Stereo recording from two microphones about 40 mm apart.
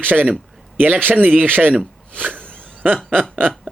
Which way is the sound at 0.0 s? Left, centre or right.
Right.